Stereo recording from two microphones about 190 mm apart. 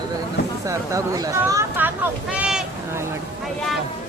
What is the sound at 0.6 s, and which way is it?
Speech, 15° right (ahead or behind).